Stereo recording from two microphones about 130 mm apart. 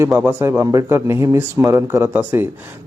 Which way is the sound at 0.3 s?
20° right (ahead or behind).